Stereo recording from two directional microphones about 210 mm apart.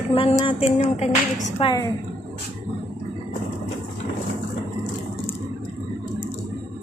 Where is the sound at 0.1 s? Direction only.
25° left (ahead or behind).